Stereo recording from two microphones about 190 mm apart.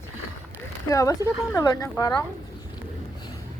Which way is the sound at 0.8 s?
15° left (ahead or behind).